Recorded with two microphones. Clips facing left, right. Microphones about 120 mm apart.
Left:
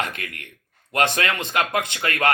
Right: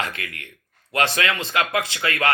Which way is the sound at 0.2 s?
50° left (ahead or behind).